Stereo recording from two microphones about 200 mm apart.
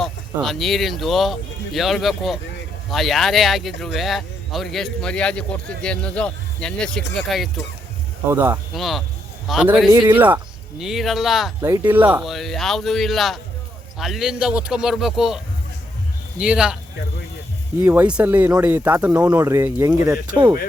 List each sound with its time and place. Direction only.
0.0 s speech: centre (ahead or behind)
8.3 s speech: 10° right (ahead or behind)
8.7 s speech: centre (ahead or behind)
9.9 s speech: 15° right (ahead or behind)
11.6 s speech: 10° right (ahead or behind)
16.4 s speech: 5° right (ahead or behind)
17.8 s speech: 5° right (ahead or behind)
20.2 s speech: 20° right (ahead or behind)